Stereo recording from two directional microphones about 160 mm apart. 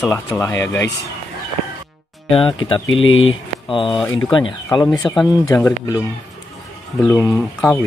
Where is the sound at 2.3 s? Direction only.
35° left (ahead or behind).